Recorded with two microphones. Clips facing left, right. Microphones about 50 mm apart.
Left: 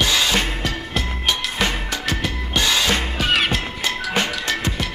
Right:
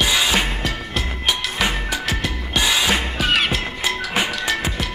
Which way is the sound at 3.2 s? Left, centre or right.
Centre.